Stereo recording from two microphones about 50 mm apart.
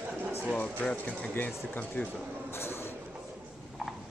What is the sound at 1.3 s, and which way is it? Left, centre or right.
Speech, left.